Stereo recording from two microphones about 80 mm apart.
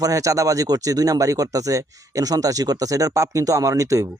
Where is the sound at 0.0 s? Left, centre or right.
Right.